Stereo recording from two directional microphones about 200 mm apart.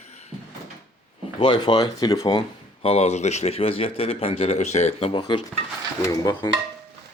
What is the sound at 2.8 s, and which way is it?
Speech, 30° left (ahead or behind).